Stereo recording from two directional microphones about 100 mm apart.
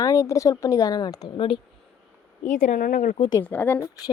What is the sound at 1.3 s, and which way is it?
Speech, 60° left (ahead or behind).